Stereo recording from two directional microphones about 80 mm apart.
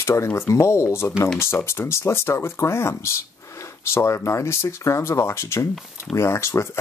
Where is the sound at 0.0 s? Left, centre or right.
Left.